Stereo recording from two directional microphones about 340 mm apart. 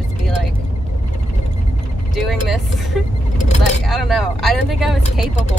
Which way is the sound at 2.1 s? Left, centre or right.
Centre.